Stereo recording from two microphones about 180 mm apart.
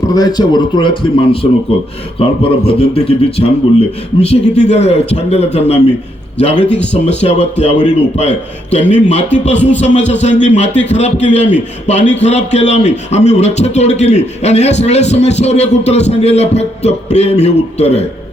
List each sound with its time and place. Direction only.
0.1 s a man's voice: 20° left (ahead or behind)
6.9 s speech: 35° left (ahead or behind)
9.6 s music: 85° left
10.1 s speech: 40° left (ahead or behind)